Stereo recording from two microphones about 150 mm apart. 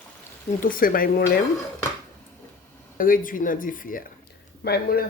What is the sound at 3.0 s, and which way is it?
Speech, 65° left (ahead or behind).